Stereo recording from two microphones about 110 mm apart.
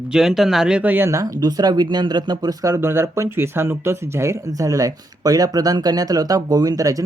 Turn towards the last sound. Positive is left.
turn(degrees=-30)  # may be behind; listen again after turning